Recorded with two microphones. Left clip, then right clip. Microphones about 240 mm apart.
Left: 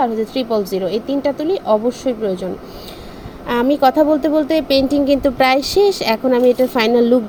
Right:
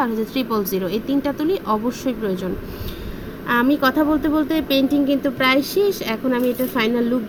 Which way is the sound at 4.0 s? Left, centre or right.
Left.